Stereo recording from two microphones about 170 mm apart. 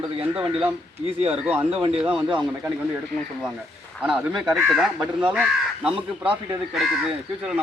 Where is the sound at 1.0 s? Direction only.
35° right (ahead or behind).